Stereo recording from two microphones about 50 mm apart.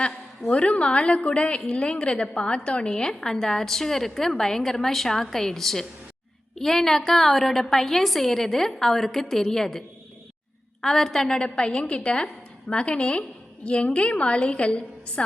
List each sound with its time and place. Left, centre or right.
0.0 s a woman's voice: left